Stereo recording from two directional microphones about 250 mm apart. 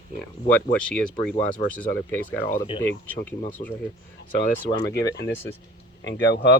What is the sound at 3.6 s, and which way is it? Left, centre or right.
Speech, left.